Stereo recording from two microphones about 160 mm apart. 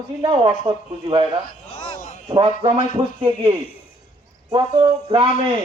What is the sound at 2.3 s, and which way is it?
A man's voice, 35° right (ahead or behind).